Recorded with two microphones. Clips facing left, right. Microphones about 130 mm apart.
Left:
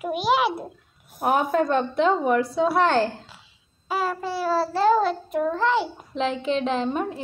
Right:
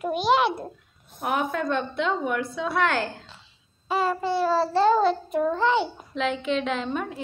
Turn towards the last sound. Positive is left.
turn(degrees=30)  # may be behind; listen again after turning